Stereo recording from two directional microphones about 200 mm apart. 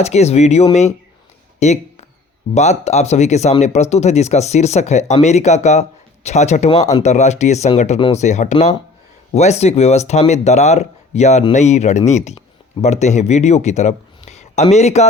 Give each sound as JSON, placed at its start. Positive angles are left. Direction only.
{"t": 0.0, "sound": "speech", "side_deg": 30}
{"t": 1.5, "sound": "a sound", "side_deg": 35}
{"t": 2.6, "sound": "speech", "side_deg": 35}